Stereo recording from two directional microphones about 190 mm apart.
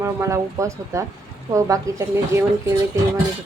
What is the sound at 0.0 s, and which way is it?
A woman's voice, 15° right (ahead or behind).